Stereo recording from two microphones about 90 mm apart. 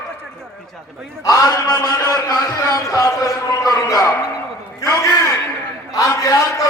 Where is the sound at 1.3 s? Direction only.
40° left (ahead or behind).